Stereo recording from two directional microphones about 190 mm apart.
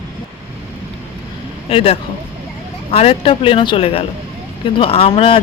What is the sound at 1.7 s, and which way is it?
Speech, 30° left (ahead or behind).